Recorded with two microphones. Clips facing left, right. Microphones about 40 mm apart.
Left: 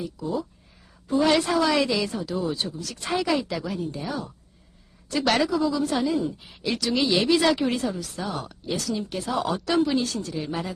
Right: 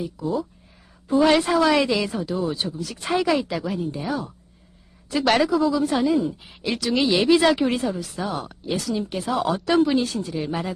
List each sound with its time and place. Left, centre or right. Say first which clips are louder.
0.2 s a woman's voice: right 3 dB; centre